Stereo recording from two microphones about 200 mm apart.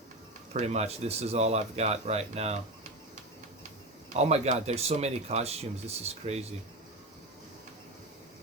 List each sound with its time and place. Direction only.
0.5 s speech: 35° right (ahead or behind)
4.1 s speech: 35° right (ahead or behind)